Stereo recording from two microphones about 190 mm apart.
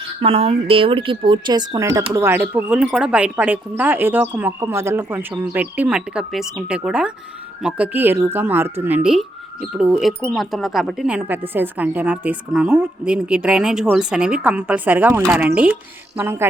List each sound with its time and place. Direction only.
0.2 s a woman's voice: 30° right (ahead or behind); by 16.5 s 10° right (ahead or behind)